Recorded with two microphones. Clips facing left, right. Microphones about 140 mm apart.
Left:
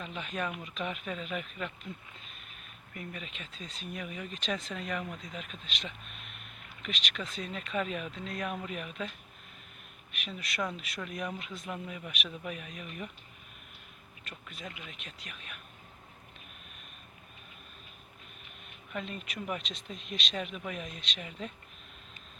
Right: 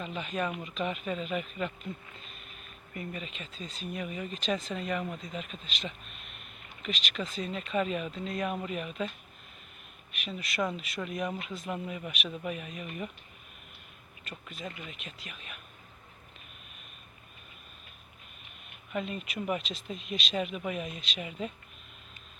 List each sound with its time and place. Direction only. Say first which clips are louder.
0.0 s speech: right 3 dB; centre (ahead or behind)
14.3 s speech: right 4 dB; centre (ahead or behind)
18.9 s speech: right 4 dB; 5° right (ahead or behind)